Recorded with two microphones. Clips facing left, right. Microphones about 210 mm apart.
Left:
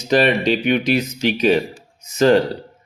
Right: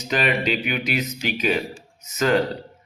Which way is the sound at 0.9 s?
30° left (ahead or behind).